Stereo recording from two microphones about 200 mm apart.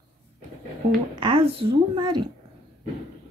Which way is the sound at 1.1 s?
25° right (ahead or behind).